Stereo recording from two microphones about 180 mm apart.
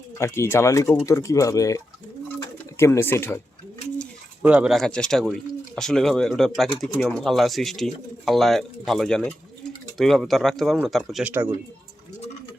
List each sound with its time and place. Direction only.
0.2 s speech: 15° left (ahead or behind)
4.4 s speech: 5° right (ahead or behind)